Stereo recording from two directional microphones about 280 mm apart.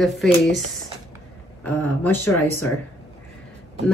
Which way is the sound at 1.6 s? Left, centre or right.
Centre.